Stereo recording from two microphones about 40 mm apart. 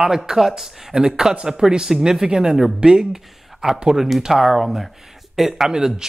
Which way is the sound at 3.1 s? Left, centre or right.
Centre.